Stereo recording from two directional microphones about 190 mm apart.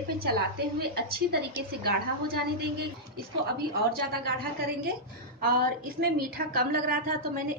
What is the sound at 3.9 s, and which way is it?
Speech, 55° right (ahead or behind).